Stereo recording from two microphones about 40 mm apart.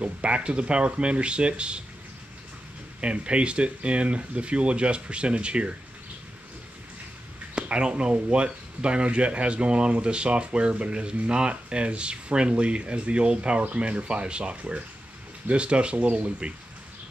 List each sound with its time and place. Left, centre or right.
0.0 s speech: right
3.0 s speech: right
7.5 s speech: right